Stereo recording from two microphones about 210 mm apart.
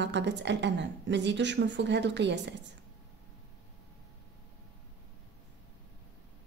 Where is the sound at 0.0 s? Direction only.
55° right (ahead or behind).